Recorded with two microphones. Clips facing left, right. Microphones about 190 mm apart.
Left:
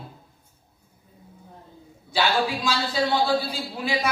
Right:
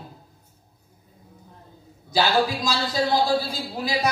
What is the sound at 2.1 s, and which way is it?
A man's voice, 40° right (ahead or behind).